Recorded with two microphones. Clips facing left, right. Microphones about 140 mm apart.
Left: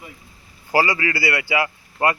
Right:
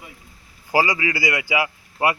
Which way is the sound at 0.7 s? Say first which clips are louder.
Left 1 dB; 15° right (ahead or behind).